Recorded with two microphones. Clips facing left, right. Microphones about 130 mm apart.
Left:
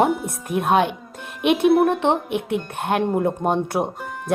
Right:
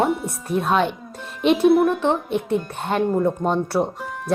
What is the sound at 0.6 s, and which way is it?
Speech, 50° left (ahead or behind).